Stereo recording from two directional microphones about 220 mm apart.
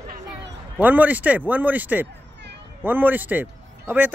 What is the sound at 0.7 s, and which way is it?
A man's voice, 5° right (ahead or behind).